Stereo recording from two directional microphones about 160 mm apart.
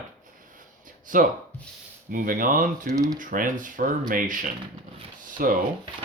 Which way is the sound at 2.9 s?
20° right (ahead or behind).